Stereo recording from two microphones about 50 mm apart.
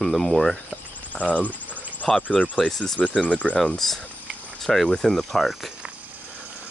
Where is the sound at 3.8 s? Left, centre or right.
Centre.